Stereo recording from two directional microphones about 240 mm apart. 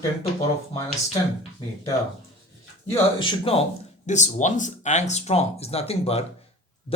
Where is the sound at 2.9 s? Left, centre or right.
Centre.